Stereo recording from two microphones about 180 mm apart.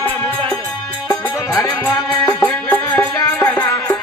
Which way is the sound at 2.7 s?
10° left (ahead or behind).